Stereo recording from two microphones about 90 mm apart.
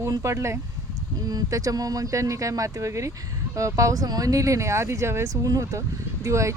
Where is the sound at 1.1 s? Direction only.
45° right (ahead or behind).